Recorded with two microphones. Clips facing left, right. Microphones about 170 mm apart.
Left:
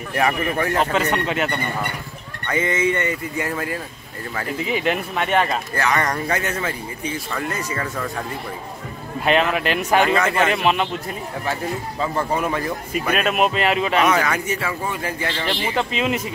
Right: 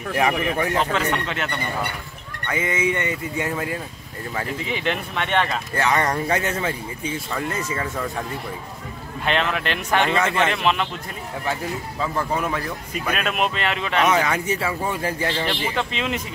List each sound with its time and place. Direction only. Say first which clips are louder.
0.1 s speech: even; 15° right (ahead or behind)
0.7 s speech: left 2 dB; 10° left (ahead or behind)
2.4 s speech: left 3 dB; 10° right (ahead or behind)
4.6 s speech: left 7 dB; 5° left (ahead or behind)
5.8 s a man's voice: right 1 dB; 25° right (ahead or behind)
9.2 s speech: left 4 dB; 5° left (ahead or behind)
12.0 s speech: left 2 dB; centre (ahead or behind)
14.0 s a man's voice: left 1 dB; 20° right (ahead or behind)
15.6 s speech: left 3 dB; 5° left (ahead or behind)